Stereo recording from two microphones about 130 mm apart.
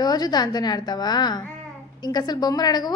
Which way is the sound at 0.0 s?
30° left (ahead or behind).